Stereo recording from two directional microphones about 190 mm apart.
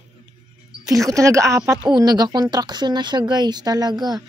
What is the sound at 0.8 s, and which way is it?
Speech, 15° right (ahead or behind).